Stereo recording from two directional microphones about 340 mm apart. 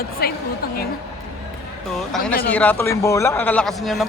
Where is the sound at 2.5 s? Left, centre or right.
Centre.